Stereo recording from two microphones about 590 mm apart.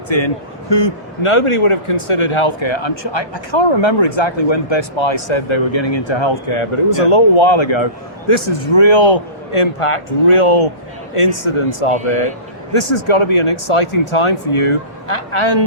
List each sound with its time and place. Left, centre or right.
0.1 s a man's voice: left